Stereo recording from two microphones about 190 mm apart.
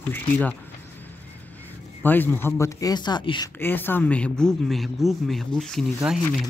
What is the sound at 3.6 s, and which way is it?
Speech, 10° left (ahead or behind).